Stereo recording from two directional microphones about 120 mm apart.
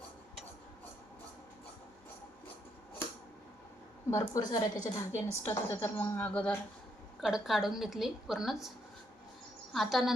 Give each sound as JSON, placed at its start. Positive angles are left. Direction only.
{"t": 4.1, "sound": "a woman's voice", "side_deg": 35}
{"t": 5.1, "sound": "a woman's voice", "side_deg": 20}
{"t": 7.2, "sound": "a woman's voice", "side_deg": -5}
{"t": 9.7, "sound": "a woman's voice", "side_deg": 0}